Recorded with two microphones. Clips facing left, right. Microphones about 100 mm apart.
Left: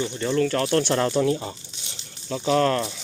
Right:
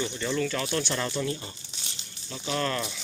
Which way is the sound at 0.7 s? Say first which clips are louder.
Left 8 dB; 65° left (ahead or behind).